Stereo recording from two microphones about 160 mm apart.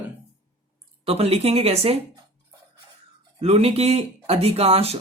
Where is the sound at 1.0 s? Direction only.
40° right (ahead or behind).